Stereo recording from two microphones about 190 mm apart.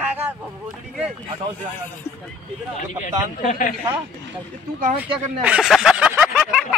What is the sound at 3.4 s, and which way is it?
Speech, 40° left (ahead or behind).